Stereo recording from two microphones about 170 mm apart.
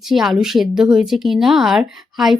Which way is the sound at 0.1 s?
Centre (ahead or behind).